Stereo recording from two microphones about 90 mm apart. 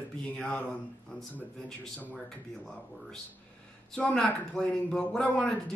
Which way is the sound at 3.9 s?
10° left (ahead or behind).